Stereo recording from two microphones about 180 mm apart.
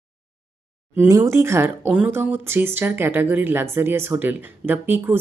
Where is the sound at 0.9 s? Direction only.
15° right (ahead or behind).